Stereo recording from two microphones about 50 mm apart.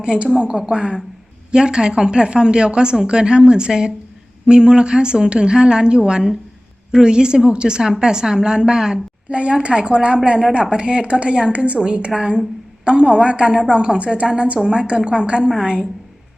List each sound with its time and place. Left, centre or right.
0.0 s a woman's voice: centre
9.3 s a woman's voice: right